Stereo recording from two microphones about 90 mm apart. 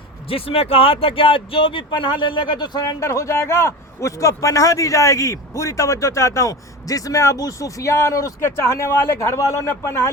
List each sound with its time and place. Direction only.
0.3 s speech: 90° left; by 2.9 s 55° left (ahead or behind)
3.0 s a man's voice: 35° left (ahead or behind)